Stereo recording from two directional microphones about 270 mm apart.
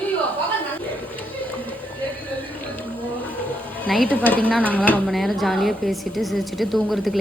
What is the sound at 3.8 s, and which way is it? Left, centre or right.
Speech, centre.